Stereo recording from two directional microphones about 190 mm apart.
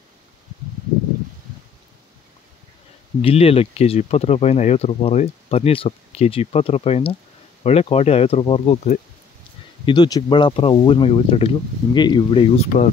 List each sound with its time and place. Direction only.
3.2 s speech: 30° left (ahead or behind)
9.8 s speech: 20° left (ahead or behind)